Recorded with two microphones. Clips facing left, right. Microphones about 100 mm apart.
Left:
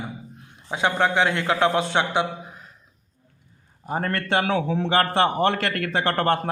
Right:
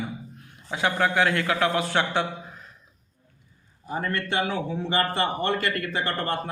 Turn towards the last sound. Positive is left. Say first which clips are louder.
# left 6 dB
turn(degrees=80)